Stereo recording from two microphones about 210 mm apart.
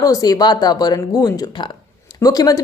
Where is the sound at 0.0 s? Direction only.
15° left (ahead or behind).